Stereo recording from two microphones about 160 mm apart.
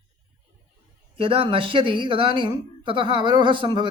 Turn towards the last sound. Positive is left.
turn(degrees=-30)  # may be behind; listen again after turning